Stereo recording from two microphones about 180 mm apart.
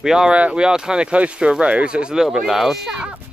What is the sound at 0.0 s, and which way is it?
Speech, 5° right (ahead or behind).